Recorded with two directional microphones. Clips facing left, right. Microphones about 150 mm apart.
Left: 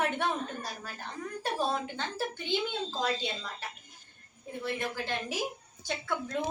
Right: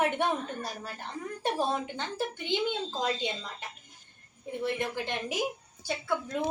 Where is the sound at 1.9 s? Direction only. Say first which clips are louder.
Right 1 dB; 15° right (ahead or behind).